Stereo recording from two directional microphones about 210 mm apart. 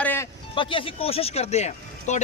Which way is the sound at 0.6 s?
25° left (ahead or behind).